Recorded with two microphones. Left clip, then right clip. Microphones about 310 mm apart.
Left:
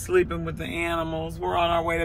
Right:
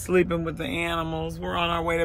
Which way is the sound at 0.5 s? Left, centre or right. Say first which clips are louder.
Even; centre.